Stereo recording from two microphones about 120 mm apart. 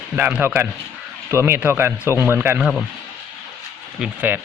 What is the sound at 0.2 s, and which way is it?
Speech, 10° right (ahead or behind).